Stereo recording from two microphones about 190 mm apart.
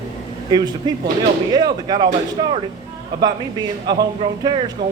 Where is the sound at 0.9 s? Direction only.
20° right (ahead or behind).